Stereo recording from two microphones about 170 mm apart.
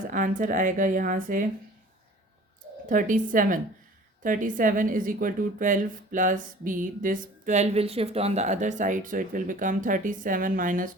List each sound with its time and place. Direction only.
0.1 s a woman's voice: 50° right (ahead or behind)
2.8 s a woman's voice: 50° right (ahead or behind)